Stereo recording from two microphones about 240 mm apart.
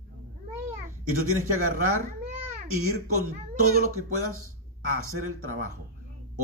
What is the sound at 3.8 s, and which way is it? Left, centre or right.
Speech, right.